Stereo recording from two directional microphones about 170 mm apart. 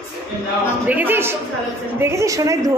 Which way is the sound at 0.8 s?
10° right (ahead or behind).